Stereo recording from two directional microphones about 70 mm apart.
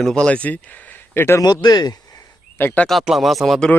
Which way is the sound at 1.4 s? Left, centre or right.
Left.